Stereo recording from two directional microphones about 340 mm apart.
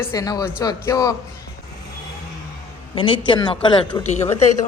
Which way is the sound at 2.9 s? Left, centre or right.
Centre.